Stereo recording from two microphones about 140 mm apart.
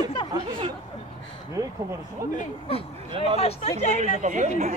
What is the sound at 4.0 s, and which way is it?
Speech, 60° right (ahead or behind).